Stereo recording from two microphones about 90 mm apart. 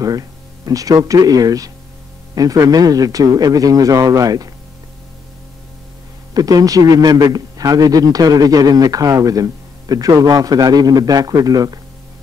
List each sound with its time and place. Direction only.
0.7 s a man's voice: 40° right (ahead or behind)
6.3 s a man's voice: 45° right (ahead or behind)